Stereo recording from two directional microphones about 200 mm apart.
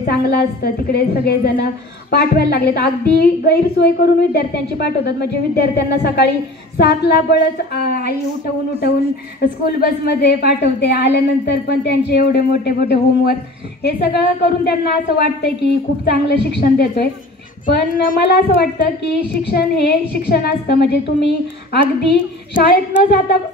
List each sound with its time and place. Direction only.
0.0 s a woman's voice: 50° left (ahead or behind)
9.7 s a woman's voice: 50° left (ahead or behind)
22.5 s a woman's voice: 55° left (ahead or behind)